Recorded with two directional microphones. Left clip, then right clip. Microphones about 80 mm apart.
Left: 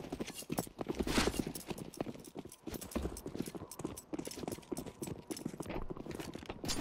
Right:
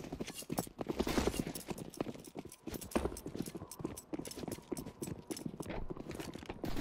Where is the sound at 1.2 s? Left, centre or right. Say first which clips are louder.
Left 1 dB; centre.